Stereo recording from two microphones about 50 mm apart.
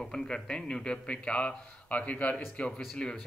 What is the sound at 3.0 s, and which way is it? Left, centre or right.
Speech, centre.